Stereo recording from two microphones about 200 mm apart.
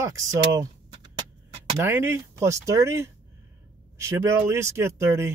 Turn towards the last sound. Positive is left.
turn(degrees=-15)  # may be behind; listen again after turning